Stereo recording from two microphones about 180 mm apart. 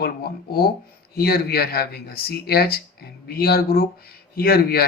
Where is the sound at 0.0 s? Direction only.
60° left (ahead or behind).